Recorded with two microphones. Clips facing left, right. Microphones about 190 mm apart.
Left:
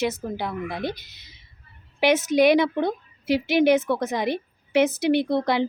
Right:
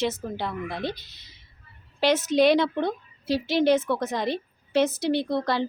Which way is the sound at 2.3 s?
15° left (ahead or behind).